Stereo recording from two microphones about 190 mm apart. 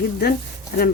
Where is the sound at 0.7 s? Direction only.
55° left (ahead or behind).